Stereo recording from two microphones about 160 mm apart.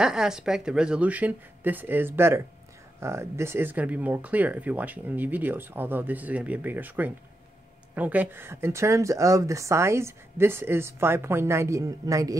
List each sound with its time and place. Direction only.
0.0 s speech: 5° right (ahead or behind); by 12.4 s 20° right (ahead or behind)